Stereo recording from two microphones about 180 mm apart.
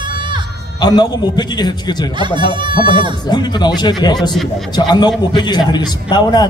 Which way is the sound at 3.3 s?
25° left (ahead or behind).